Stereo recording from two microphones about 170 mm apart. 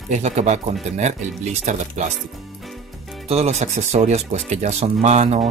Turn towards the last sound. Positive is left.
turn(degrees=-40)  # may be behind; listen again after turning